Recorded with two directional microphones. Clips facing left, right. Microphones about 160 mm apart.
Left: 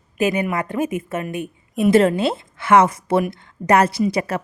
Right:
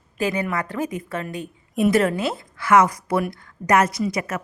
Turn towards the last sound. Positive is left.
turn(degrees=30)  # may be behind; listen again after turning